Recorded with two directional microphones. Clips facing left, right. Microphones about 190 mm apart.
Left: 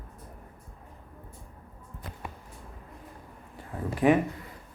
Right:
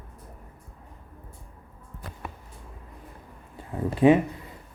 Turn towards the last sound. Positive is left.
turn(degrees=-20)  # may be behind; listen again after turning